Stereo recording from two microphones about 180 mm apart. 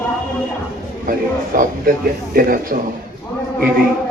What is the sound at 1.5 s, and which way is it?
A man's voice, 50° right (ahead or behind).